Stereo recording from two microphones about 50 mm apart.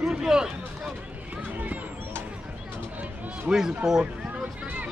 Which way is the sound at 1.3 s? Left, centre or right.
Right.